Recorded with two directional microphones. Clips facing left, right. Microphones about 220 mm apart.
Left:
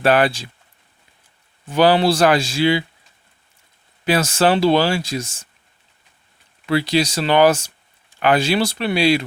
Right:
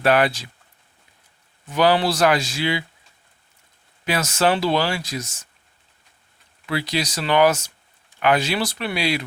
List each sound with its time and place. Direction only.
0.0 s speech: 30° left (ahead or behind)
1.6 s speech: 30° left (ahead or behind)
4.0 s speech: 30° left (ahead or behind)
6.7 s speech: 30° left (ahead or behind)